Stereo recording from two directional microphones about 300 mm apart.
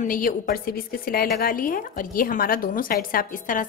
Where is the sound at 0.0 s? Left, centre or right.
Left.